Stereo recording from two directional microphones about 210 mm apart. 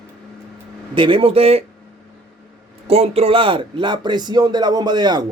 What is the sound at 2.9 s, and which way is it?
Speech, 30° right (ahead or behind).